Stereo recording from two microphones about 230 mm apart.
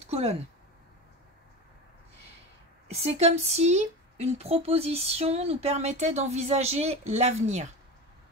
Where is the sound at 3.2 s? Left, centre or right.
Right.